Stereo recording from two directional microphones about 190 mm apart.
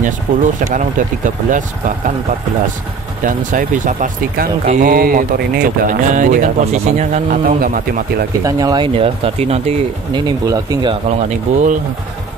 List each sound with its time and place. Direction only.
0.0 s speech: 40° right (ahead or behind)
3.3 s speech: 45° right (ahead or behind)
8.5 s speech: 20° right (ahead or behind)
11.1 s speech: 40° right (ahead or behind)